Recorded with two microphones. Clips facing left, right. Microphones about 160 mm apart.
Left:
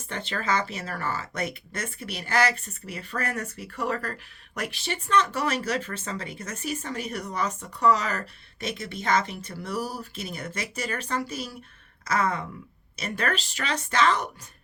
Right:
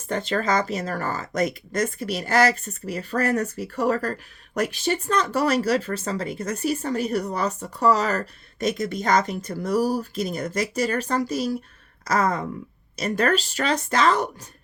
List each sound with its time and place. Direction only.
0.1 s speech: 40° right (ahead or behind)